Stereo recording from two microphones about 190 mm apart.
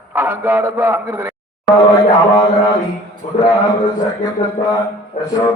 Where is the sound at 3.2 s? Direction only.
40° left (ahead or behind).